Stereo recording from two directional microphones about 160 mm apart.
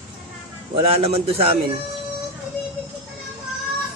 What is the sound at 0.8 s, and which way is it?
Speech, 40° right (ahead or behind).